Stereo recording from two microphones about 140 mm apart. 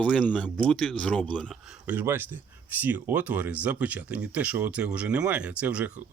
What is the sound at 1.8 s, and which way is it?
Speech, 15° right (ahead or behind).